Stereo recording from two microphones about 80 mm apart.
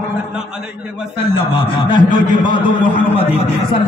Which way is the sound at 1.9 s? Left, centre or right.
Left.